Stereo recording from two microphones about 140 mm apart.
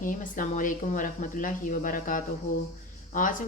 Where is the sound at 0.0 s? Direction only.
70° left (ahead or behind).